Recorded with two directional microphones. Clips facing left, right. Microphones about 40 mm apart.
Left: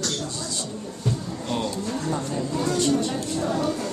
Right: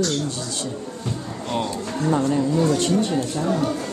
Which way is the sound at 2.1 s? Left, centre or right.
Right.